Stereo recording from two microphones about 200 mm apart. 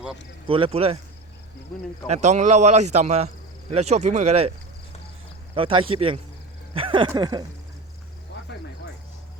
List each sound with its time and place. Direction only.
0.4 s speech: 25° right (ahead or behind)
2.0 s speech: 35° right (ahead or behind)
5.5 s speech: 25° right (ahead or behind)